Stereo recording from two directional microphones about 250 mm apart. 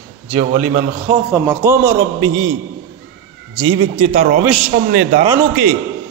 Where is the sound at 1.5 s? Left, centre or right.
Centre.